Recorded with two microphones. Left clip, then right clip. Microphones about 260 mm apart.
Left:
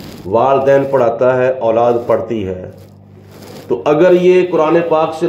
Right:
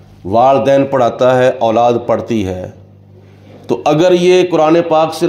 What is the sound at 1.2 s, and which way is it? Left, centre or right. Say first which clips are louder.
Speech: right 2 dB; right.